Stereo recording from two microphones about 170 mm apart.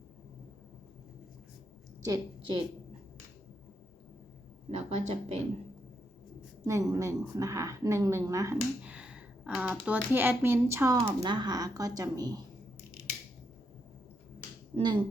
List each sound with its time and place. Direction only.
2.0 s a woman's voice: 20° right (ahead or behind)
4.7 s speech: 40° right (ahead or behind)
6.7 s speech: 20° right (ahead or behind)
8.8 s speech: 5° right (ahead or behind); by 12.4 s 20° right (ahead or behind)
14.7 s speech: 30° right (ahead or behind)